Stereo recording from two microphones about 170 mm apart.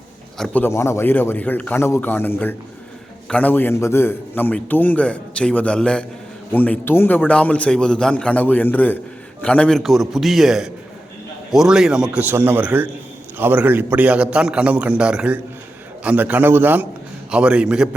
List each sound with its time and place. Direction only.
0.3 s a man's voice: 5° left (ahead or behind)